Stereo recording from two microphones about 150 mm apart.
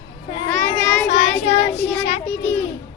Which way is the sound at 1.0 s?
45° left (ahead or behind).